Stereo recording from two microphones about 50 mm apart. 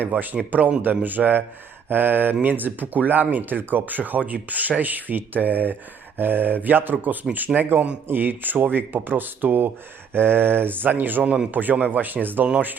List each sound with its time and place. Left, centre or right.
0.0 s speech: right
10.1 s mantra: right
11.2 s speech: right